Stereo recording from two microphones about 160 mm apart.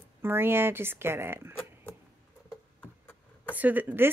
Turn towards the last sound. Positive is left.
turn(degrees=-10)  # may be behind; listen again after turning